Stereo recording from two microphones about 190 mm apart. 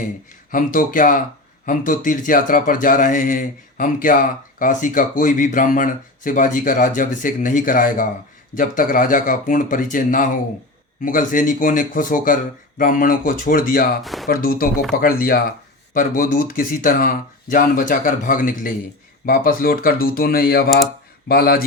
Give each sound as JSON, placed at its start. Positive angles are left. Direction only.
{"t": 0.5, "sound": "speech", "side_deg": 45}
{"t": 14.0, "sound": "speech", "side_deg": 0}
{"t": 14.3, "sound": "speech", "side_deg": 50}